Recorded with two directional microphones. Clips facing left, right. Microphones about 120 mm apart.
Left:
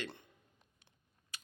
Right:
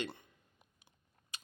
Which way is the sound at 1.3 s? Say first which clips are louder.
Right 1 dB; 25° right (ahead or behind).